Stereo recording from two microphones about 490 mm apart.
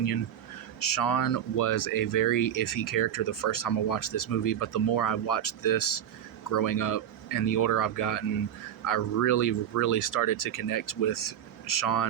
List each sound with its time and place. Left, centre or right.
0.8 s speech: left